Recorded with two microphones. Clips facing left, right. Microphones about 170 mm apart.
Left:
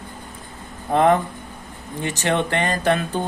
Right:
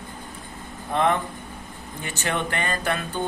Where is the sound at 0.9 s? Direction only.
35° left (ahead or behind).